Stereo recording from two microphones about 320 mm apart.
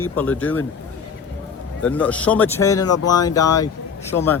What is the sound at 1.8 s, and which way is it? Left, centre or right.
Speech, centre.